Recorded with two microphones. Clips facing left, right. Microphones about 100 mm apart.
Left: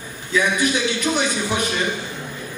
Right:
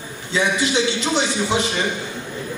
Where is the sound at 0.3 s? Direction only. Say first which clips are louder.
Even; 25° right (ahead or behind).